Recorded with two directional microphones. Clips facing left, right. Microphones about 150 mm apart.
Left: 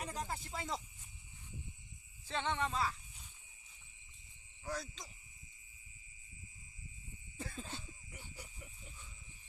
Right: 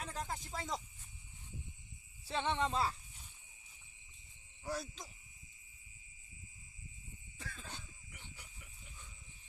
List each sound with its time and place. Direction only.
0.0 s snake: 10° left (ahead or behind)
2.2 s insect: 10° right (ahead or behind)
2.6 s speech: 25° right (ahead or behind)
4.6 s insect: 10° right (ahead or behind)
7.3 s a sound: 30° left (ahead or behind)